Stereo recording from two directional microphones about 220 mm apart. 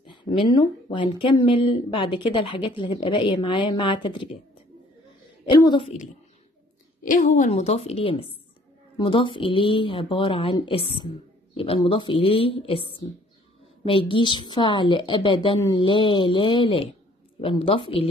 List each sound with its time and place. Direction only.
0.0 s speech: 20° left (ahead or behind)
5.4 s speech: 20° left (ahead or behind)
7.0 s speech: 35° left (ahead or behind)